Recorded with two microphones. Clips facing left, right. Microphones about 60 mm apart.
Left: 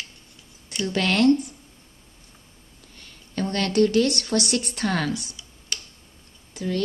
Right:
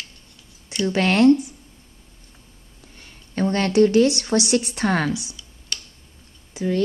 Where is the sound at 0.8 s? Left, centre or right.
Right.